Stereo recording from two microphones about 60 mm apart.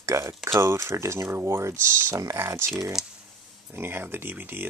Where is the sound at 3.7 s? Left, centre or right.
Right.